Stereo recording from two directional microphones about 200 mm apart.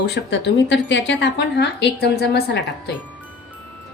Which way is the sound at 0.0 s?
60° left (ahead or behind).